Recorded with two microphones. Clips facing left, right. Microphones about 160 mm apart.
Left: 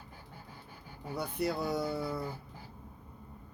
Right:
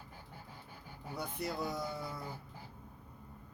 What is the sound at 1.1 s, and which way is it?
Speech, 65° left (ahead or behind).